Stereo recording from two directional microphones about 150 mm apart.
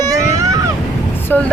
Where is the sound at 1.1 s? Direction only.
15° left (ahead or behind).